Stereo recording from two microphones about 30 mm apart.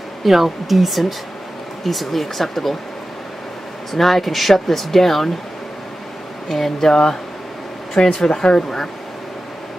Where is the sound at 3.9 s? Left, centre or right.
Centre.